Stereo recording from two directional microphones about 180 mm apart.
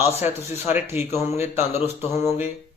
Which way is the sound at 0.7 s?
10° right (ahead or behind).